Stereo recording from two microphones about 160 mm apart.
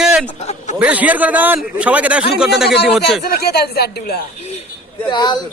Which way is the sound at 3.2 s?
75° left (ahead or behind).